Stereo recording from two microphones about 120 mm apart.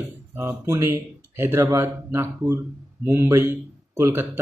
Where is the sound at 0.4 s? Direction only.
20° right (ahead or behind).